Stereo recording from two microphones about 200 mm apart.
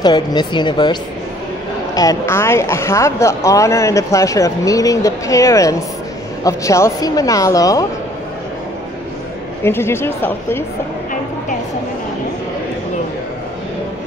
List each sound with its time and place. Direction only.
0.0 s speech: 20° left (ahead or behind)
2.0 s speech: 15° left (ahead or behind)
9.6 s speech: 10° left (ahead or behind)